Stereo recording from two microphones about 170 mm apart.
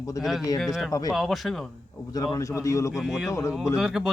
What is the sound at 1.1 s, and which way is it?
Speech, centre (ahead or behind).